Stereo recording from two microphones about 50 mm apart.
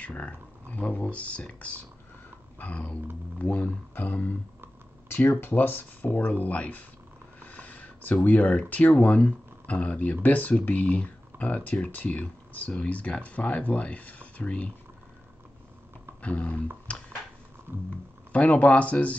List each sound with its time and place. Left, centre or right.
0.0 s speech: left
3.9 s speech: left
16.2 s a sound: left
17.8 s speech: left